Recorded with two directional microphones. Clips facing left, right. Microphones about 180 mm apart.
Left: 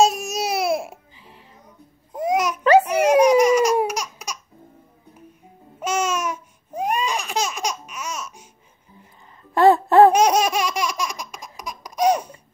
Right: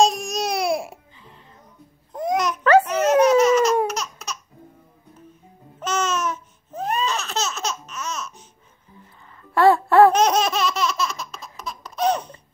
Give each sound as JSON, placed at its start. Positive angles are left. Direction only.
{"t": 0.0, "sound": "baby cry", "side_deg": 5}
{"t": 2.1, "sound": "laughter", "side_deg": 10}
{"t": 5.8, "sound": "laughter", "side_deg": 10}
{"t": 9.4, "sound": "baby laughter", "side_deg": 20}